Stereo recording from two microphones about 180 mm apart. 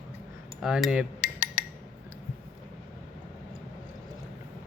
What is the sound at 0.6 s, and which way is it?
Cutlery, 5° right (ahead or behind).